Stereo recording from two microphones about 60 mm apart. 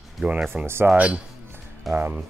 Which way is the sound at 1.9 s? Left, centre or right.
Right.